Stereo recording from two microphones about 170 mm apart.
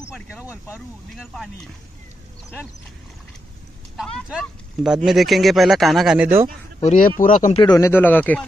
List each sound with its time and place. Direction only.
0.7 s speech: centre (ahead or behind)
3.9 s speech: centre (ahead or behind)
6.8 s speech: 50° left (ahead or behind)
7.5 s speech: 25° left (ahead or behind)